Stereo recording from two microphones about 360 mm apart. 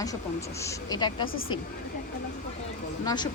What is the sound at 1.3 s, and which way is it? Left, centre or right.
Speech, left.